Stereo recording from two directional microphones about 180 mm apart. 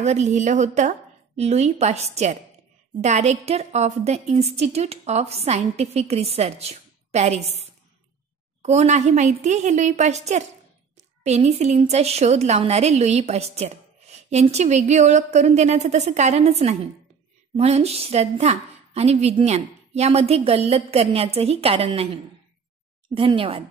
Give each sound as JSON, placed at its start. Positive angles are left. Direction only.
{"t": 0.0, "sound": "a woman's voice", "side_deg": -40}
{"t": 8.6, "sound": "a woman's voice", "side_deg": -40}